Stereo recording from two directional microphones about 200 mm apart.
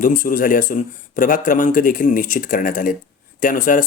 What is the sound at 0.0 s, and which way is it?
Speech, 45° left (ahead or behind).